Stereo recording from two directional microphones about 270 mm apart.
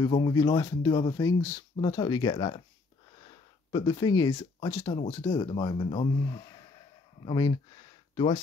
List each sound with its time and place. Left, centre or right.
0.0 s speech: centre
3.7 s speech: centre